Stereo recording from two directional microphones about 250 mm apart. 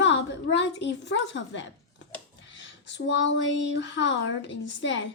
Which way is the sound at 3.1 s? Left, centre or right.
Left.